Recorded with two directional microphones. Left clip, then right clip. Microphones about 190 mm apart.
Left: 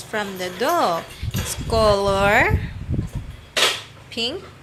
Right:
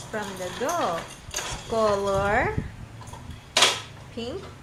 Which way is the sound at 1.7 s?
25° left (ahead or behind).